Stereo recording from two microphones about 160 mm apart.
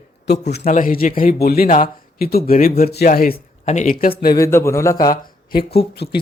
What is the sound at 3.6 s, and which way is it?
Speech, 50° left (ahead or behind).